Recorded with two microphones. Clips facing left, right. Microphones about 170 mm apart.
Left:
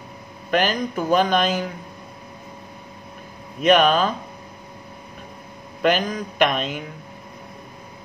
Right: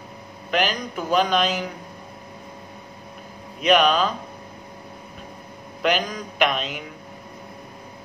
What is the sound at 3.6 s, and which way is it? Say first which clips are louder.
Speech: left 2 dB; 50° left (ahead or behind).